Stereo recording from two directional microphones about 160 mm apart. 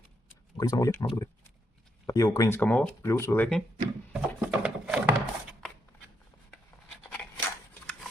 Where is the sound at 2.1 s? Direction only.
20° left (ahead or behind).